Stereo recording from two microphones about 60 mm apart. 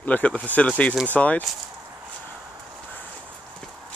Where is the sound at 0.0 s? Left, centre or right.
Left.